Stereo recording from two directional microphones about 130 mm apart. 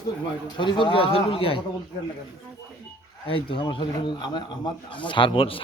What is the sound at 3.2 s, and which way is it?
Speech, 45° left (ahead or behind).